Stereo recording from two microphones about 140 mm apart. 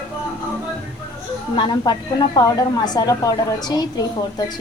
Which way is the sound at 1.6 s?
35° left (ahead or behind).